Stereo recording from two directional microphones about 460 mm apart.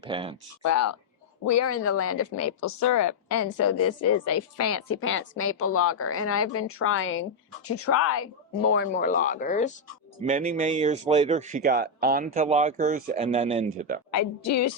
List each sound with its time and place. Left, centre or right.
0.1 s speech: centre
0.6 s a woman's voice: left; by 9.7 s centre
10.2 s speech: centre
14.1 s a woman's voice: left